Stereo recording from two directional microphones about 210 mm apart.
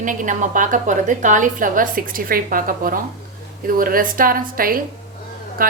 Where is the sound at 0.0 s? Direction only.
40° right (ahead or behind).